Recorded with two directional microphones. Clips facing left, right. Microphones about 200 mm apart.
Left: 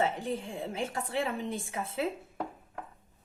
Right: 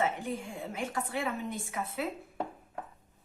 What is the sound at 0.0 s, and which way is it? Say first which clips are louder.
A woman's voice: left 1 dB; 30° left (ahead or behind).